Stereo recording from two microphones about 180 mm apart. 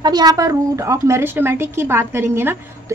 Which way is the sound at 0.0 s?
20° right (ahead or behind).